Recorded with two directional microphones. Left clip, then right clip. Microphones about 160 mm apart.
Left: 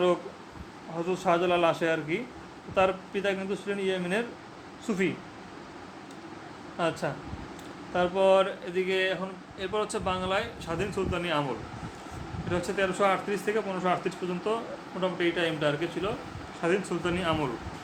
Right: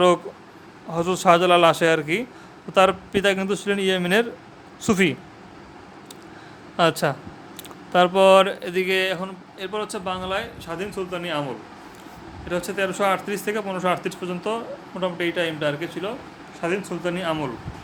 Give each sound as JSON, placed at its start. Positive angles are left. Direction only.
{"t": 0.9, "sound": "speech", "side_deg": -50}
{"t": 6.7, "sound": "speech", "side_deg": -50}
{"t": 9.6, "sound": "speech", "side_deg": -25}
{"t": 12.5, "sound": "speech", "side_deg": -25}